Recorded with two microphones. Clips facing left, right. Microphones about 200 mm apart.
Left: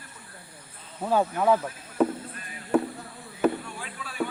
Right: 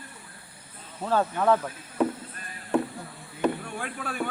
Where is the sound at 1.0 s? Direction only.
10° left (ahead or behind).